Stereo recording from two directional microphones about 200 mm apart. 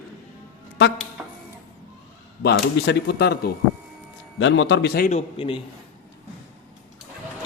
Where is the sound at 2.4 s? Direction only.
55° left (ahead or behind).